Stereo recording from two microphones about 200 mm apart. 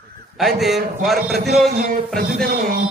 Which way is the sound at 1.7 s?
45° right (ahead or behind).